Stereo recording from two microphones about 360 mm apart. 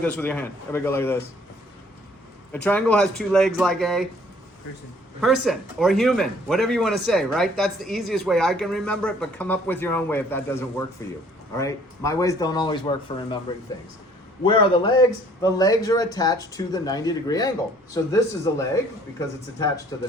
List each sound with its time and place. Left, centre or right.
0.2 s speech: centre
2.6 s a man's voice: centre
5.2 s a man's voice: centre
14.4 s speech: centre
19.9 s speech: centre